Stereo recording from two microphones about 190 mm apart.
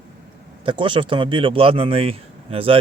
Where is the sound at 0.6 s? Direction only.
25° right (ahead or behind).